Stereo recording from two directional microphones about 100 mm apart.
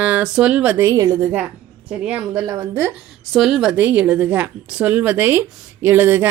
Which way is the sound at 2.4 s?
35° right (ahead or behind).